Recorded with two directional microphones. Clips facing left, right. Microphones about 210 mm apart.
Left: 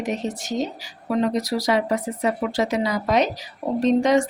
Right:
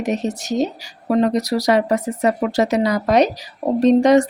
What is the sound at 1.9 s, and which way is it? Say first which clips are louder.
Speech: right 4 dB; 75° right (ahead or behind).